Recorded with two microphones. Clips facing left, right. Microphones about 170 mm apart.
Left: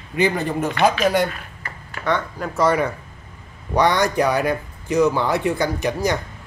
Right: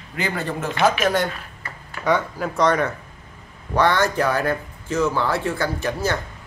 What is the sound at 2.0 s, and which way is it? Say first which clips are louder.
Speech: right 2 dB; 10° right (ahead or behind).